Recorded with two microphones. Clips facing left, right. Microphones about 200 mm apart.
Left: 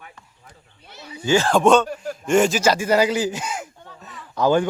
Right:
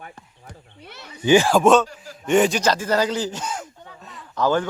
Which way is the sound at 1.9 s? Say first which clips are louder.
Left 11 dB; 60° left (ahead or behind).